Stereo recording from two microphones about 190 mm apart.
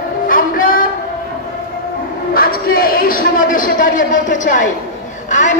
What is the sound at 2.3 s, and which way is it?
A man's voice, 50° left (ahead or behind).